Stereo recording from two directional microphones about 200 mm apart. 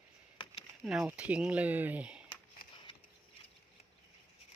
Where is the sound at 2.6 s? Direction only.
50° left (ahead or behind).